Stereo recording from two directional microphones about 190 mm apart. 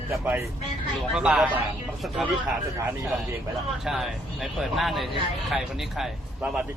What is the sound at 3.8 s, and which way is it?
A man's voice, centre (ahead or behind).